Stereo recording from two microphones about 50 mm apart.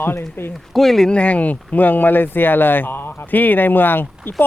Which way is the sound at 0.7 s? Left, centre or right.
Centre.